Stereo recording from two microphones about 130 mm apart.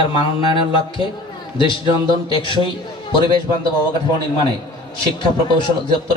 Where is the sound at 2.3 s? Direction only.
40° left (ahead or behind).